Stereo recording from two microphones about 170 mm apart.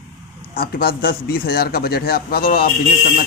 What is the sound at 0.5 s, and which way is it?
A man's voice, 60° left (ahead or behind).